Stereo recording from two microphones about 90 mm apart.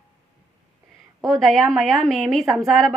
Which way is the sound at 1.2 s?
5° left (ahead or behind).